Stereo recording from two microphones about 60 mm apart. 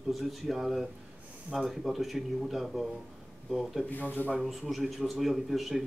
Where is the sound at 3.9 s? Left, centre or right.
Left.